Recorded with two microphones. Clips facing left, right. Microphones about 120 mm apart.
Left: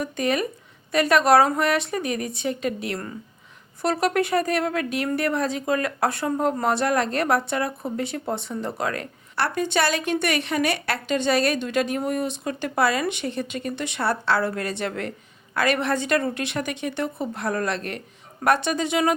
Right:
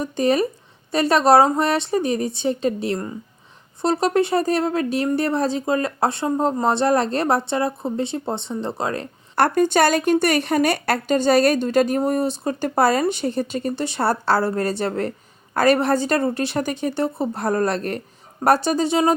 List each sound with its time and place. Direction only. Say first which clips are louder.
0.0 s a woman's voice: right 5 dB; 30° right (ahead or behind)
9.3 s a woman's voice: right 7 dB; 45° right (ahead or behind)